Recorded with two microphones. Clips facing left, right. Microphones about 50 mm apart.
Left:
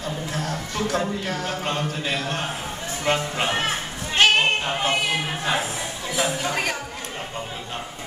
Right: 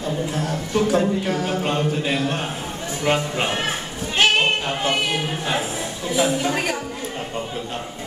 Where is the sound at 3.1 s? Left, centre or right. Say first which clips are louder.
Right 1 dB; centre.